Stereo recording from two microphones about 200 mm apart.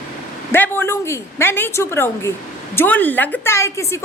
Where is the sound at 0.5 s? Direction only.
10° left (ahead or behind).